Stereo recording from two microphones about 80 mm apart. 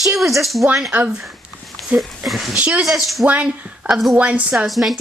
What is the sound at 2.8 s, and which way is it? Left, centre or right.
Speech, centre.